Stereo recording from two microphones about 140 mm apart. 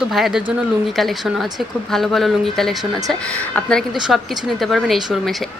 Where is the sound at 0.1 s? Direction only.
Centre (ahead or behind).